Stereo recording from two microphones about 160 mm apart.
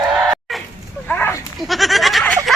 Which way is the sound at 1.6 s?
Centre (ahead or behind).